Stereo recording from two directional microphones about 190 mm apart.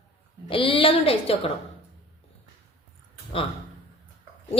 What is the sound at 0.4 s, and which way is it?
Speech, 25° left (ahead or behind).